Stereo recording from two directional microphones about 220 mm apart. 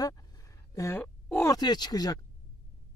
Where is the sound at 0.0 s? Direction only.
15° left (ahead or behind).